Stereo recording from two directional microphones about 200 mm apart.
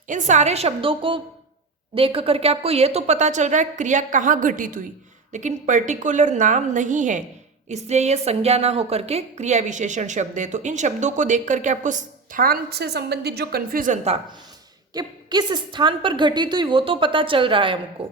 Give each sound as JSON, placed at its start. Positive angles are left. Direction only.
{"t": 0.1, "sound": "a woman's voice", "side_deg": -35}
{"t": 14.9, "sound": "a woman's voice", "side_deg": -20}